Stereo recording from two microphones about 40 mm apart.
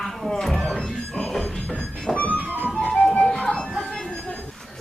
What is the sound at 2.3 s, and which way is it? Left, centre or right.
Music, right.